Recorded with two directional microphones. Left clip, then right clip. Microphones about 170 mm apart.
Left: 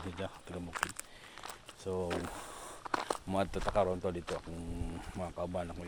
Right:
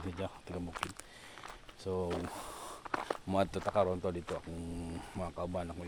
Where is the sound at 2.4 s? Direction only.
25° right (ahead or behind).